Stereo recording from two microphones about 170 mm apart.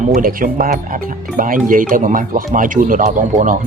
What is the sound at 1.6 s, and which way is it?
Speech, 50° right (ahead or behind).